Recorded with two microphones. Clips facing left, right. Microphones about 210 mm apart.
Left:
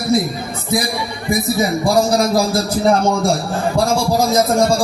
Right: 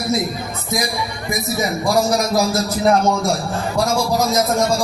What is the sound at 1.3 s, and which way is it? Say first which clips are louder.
Music: left 5 dB; 30° left (ahead or behind).